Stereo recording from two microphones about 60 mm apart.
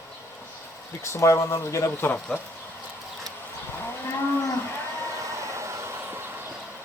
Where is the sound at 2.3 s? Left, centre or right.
Centre.